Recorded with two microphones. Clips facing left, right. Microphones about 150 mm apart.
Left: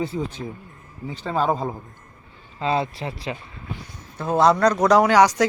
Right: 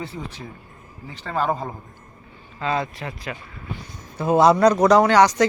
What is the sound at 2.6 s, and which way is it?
Speech, 30° left (ahead or behind).